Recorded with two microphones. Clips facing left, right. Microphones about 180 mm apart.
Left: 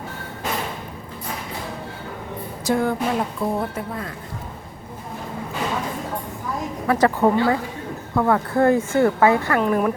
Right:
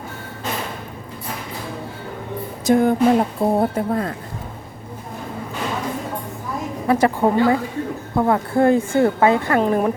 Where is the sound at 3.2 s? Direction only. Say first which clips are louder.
Right 6 dB; 35° right (ahead or behind).